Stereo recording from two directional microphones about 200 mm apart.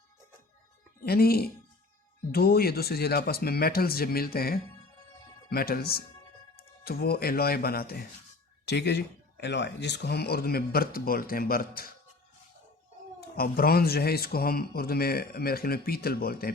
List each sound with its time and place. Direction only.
1.0 s speech: 50° left (ahead or behind)
13.1 s speech: 50° left (ahead or behind)